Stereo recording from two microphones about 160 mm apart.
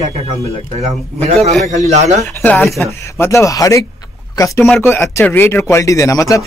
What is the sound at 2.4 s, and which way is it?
Speech, 10° left (ahead or behind).